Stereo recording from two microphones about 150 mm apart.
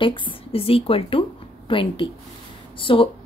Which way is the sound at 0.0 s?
35° left (ahead or behind).